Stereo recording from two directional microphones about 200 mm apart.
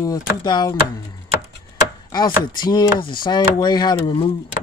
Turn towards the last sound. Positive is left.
turn(degrees=25)  # may be behind; listen again after turning